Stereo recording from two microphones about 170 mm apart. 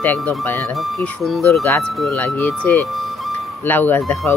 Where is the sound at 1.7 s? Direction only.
15° left (ahead or behind).